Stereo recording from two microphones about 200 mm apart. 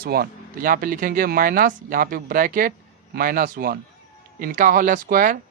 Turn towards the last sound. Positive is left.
turn(degrees=-45)  # may be behind; listen again after turning